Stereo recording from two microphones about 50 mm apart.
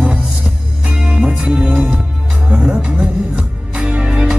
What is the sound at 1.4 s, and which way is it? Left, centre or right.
Music, right.